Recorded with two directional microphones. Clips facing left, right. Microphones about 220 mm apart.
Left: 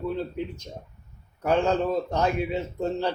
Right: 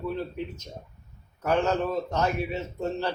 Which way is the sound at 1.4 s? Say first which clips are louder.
Left 2 dB; 15° left (ahead or behind).